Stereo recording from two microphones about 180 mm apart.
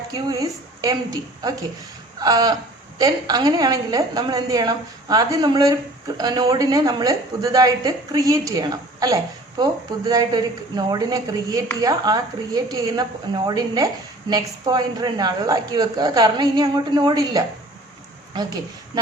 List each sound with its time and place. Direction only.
0.1 s a woman's voice: 20° right (ahead or behind)